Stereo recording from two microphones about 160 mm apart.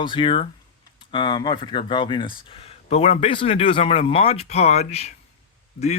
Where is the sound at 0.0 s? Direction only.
30° left (ahead or behind).